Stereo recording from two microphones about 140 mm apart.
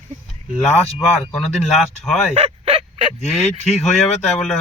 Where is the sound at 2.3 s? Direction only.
45° right (ahead or behind).